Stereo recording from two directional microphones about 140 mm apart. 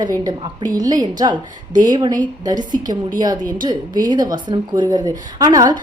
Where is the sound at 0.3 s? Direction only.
25° right (ahead or behind).